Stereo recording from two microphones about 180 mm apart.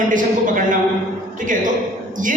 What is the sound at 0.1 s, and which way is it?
Speech, 45° right (ahead or behind).